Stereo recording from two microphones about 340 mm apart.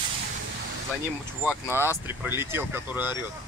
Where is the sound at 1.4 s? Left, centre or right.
Centre.